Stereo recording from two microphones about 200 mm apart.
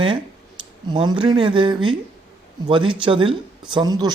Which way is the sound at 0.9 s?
25° right (ahead or behind).